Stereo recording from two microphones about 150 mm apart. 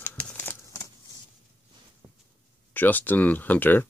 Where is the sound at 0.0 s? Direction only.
10° left (ahead or behind).